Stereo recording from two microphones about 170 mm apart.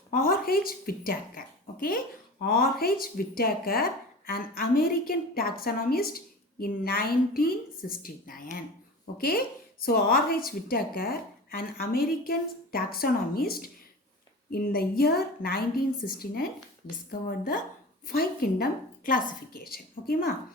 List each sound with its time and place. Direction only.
0.1 s a woman's voice: 60° left (ahead or behind)